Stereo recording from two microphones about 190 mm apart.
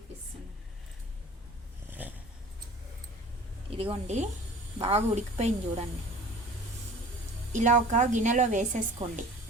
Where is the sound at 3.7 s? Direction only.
30° right (ahead or behind).